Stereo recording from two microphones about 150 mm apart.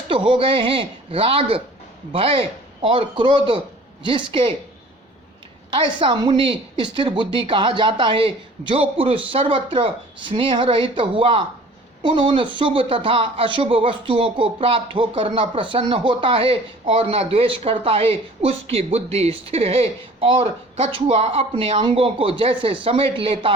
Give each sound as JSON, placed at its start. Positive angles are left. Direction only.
{"t": 0.3, "sound": "speech", "side_deg": -35}
{"t": 5.7, "sound": "speech", "side_deg": -35}